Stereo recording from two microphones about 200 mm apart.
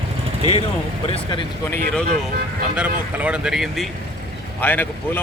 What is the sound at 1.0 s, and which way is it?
Speech, 25° left (ahead or behind).